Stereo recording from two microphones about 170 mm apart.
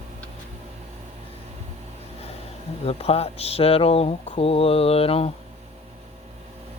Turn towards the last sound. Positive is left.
turn(degrees=35)  # may be behind; listen again after turning